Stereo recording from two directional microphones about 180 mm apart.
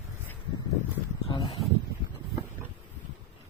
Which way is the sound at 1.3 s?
25° left (ahead or behind).